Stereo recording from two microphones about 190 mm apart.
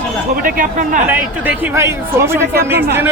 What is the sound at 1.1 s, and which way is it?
Speech, 10° right (ahead or behind).